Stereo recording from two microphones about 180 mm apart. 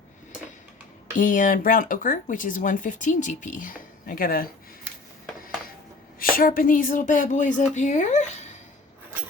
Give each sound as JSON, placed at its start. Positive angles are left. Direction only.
{"t": 1.1, "sound": "speech", "side_deg": 45}
{"t": 6.1, "sound": "speech", "side_deg": 50}